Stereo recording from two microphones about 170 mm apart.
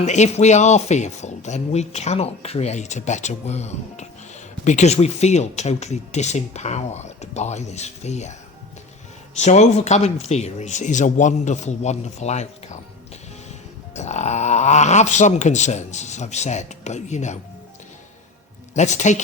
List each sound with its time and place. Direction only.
0.0 s speech: 45° left (ahead or behind)
9.3 s speech: 45° left (ahead or behind)
13.9 s speech: 40° left (ahead or behind)
18.7 s speech: 45° left (ahead or behind)